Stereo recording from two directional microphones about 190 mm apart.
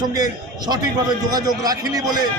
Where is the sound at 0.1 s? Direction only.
20° right (ahead or behind).